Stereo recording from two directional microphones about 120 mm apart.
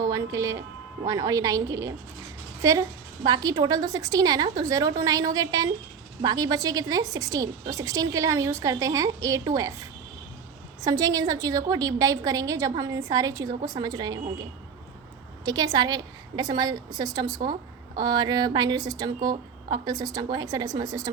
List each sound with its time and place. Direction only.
0.1 s a woman's voice: 25° right (ahead or behind)
10.8 s a woman's voice: 30° right (ahead or behind)
15.4 s a woman's voice: 35° right (ahead or behind)